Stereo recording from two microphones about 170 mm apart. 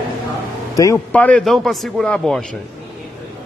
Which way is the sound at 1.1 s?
5° left (ahead or behind).